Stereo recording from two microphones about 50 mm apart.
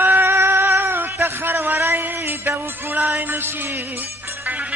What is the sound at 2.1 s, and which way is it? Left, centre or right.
Music, right.